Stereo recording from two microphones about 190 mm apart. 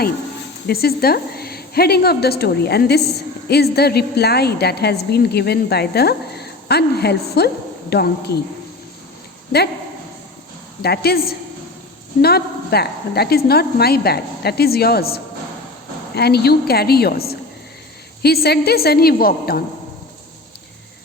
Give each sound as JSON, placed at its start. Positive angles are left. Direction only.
{"t": 0.7, "sound": "a woman's voice", "side_deg": 55}
{"t": 10.8, "sound": "a woman's voice", "side_deg": 55}